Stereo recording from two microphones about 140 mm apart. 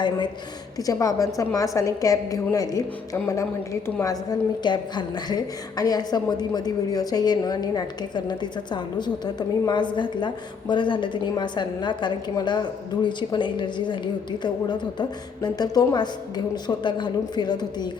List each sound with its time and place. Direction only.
0.8 s a woman's voice: 25° left (ahead or behind)